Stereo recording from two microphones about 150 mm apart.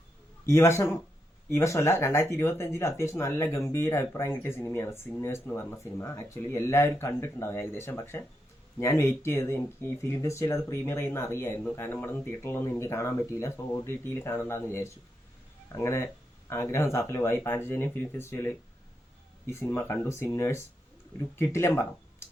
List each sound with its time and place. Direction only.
0.4 s a man's voice: 20° left (ahead or behind)